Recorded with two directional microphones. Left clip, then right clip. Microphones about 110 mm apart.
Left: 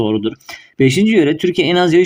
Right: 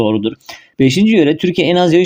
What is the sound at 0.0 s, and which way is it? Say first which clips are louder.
Speech: right 2 dB; 20° right (ahead or behind).